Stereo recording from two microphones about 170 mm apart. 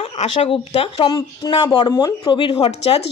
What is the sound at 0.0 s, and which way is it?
Speech, 35° left (ahead or behind).